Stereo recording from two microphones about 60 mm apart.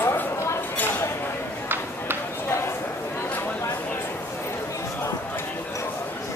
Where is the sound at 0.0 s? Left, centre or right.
Left.